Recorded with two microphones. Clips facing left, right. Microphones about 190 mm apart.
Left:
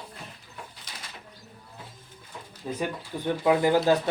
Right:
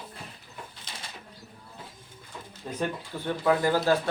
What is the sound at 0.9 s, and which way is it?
Bird, 25° right (ahead or behind).